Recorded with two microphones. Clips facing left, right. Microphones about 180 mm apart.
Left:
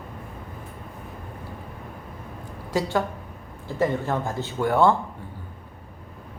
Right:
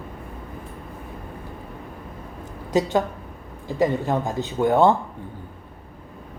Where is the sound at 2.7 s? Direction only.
20° right (ahead or behind).